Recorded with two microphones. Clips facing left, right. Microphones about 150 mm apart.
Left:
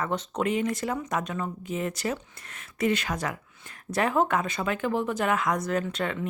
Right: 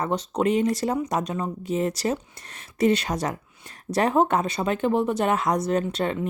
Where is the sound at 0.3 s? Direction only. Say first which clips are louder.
Right 5 dB; 35° right (ahead or behind).